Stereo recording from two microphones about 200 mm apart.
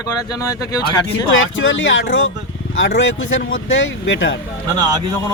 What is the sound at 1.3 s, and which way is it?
A man's voice, 75° left (ahead or behind).